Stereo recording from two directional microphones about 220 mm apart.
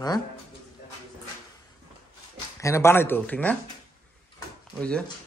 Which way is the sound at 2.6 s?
15° left (ahead or behind).